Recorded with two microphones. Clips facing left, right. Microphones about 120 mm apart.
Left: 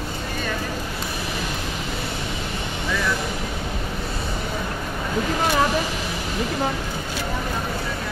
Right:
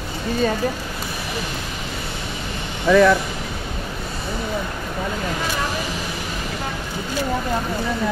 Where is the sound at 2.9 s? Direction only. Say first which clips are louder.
Right 13 dB; 65° right (ahead or behind).